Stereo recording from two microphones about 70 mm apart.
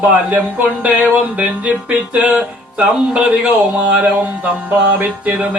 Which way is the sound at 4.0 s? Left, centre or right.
Right.